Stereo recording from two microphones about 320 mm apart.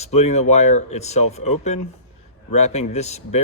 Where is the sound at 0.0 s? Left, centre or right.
Centre.